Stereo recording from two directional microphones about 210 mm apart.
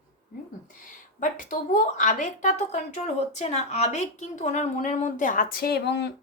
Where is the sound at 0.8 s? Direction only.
40° left (ahead or behind).